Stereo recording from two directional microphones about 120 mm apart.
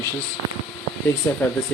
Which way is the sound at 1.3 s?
20° left (ahead or behind).